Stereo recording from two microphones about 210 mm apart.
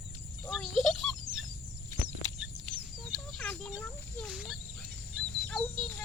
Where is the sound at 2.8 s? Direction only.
Centre (ahead or behind).